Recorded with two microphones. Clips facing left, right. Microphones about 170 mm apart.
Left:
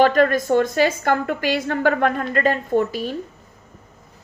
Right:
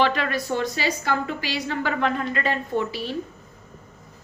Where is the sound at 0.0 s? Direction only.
45° left (ahead or behind).